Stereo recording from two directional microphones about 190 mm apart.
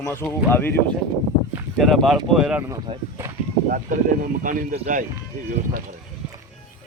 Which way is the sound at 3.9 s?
40° right (ahead or behind).